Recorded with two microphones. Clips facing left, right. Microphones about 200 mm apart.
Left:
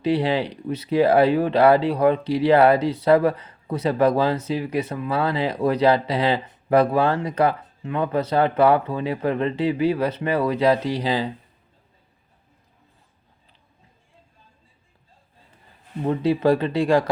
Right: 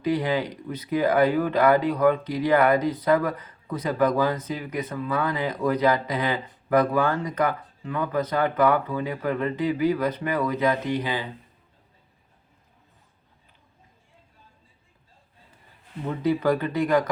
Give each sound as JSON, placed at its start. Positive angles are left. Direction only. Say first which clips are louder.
{"t": 0.0, "sound": "speech", "louder": "left 3 dB", "side_deg": 30}
{"t": 16.0, "sound": "speech", "louder": "left 4 dB", "side_deg": 25}